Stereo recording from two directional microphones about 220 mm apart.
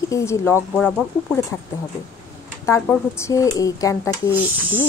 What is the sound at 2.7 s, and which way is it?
Speech, 10° left (ahead or behind).